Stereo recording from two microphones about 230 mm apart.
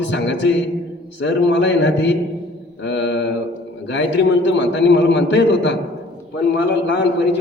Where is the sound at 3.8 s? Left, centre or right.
Left.